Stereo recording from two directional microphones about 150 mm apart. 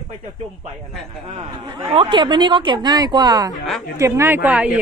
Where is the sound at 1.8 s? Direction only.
40° right (ahead or behind); by 4.7 s 10° right (ahead or behind).